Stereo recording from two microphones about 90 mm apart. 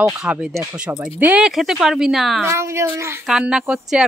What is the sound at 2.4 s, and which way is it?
Speech, 30° right (ahead or behind).